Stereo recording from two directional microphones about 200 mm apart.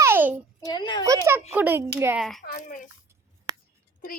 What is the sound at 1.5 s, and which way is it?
Speech, 10° right (ahead or behind).